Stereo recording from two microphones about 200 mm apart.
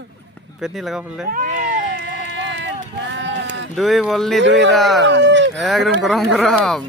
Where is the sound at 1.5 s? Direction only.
40° right (ahead or behind).